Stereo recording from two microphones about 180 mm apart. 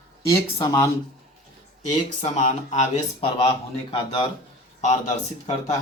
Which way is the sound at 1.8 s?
45° left (ahead or behind).